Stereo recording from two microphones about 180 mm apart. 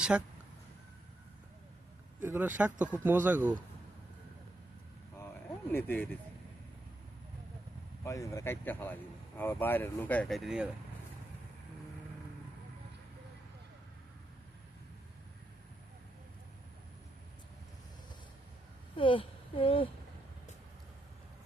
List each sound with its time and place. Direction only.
0.1 s speech: 5° right (ahead or behind)
2.2 s speech: 10° right (ahead or behind)
5.7 s speech: 10° left (ahead or behind)
8.0 s speech: 15° left (ahead or behind); by 10.7 s centre (ahead or behind)
18.9 s speech: 30° left (ahead or behind)